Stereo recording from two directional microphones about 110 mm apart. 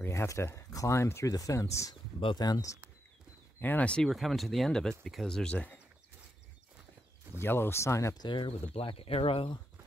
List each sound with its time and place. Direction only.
0.0 s speech: 25° left (ahead or behind)
3.6 s speech: 15° left (ahead or behind)
4.1 s speech: centre (ahead or behind)
7.3 s speech: 20° left (ahead or behind)
8.2 s speech: 45° left (ahead or behind)